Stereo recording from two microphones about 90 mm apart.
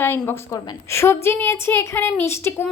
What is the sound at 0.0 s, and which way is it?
A woman's voice, 25° left (ahead or behind).